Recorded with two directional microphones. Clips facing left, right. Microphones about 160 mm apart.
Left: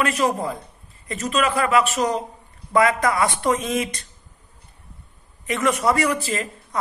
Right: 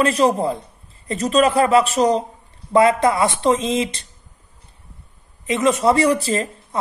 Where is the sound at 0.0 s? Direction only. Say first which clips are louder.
Right 5 dB; 30° right (ahead or behind).